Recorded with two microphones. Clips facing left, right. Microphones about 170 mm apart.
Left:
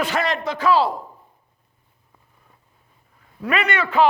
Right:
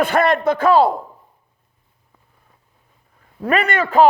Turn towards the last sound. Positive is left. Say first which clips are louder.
# right 4 dB
turn(degrees=-45)  # may be behind; listen again after turning